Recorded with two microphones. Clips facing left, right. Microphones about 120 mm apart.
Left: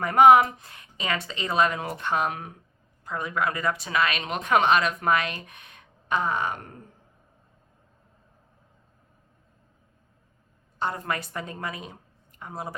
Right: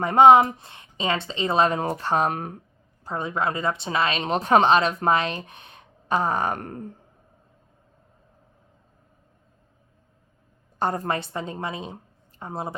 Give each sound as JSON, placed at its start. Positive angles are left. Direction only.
{"t": 0.0, "sound": "a woman's voice", "side_deg": -25}
{"t": 3.0, "sound": "a woman's voice", "side_deg": -30}
{"t": 10.8, "sound": "a woman's voice", "side_deg": -40}